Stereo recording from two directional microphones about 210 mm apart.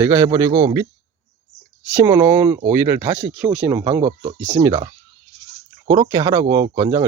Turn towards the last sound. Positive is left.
turn(degrees=-20)  # may be behind; listen again after turning